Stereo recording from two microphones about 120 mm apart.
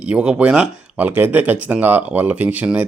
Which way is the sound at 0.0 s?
10° right (ahead or behind).